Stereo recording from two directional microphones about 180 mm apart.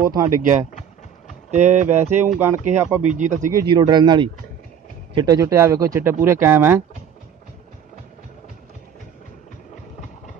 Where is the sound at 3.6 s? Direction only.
25° right (ahead or behind).